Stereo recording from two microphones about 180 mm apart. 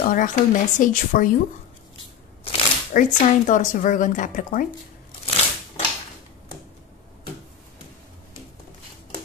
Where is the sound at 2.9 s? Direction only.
45° left (ahead or behind).